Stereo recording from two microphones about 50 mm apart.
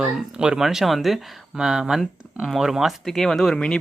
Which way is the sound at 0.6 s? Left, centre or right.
Centre.